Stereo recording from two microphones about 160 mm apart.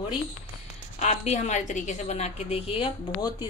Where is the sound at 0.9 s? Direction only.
45° left (ahead or behind).